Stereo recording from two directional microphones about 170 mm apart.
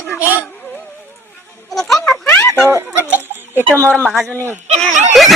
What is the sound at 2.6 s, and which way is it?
Speech, 15° right (ahead or behind).